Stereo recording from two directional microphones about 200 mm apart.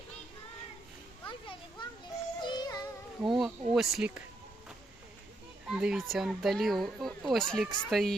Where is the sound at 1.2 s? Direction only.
25° left (ahead or behind).